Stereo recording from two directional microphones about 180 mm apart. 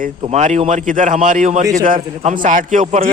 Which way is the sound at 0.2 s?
40° right (ahead or behind).